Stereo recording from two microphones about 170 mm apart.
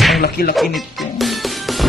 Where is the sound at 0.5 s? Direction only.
Centre (ahead or behind).